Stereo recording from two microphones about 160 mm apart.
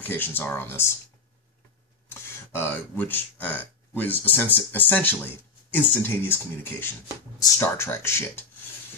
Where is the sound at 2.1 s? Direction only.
15° left (ahead or behind).